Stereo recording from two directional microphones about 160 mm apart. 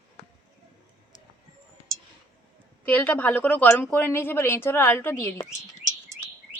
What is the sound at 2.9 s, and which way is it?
A woman's voice, 10° left (ahead or behind).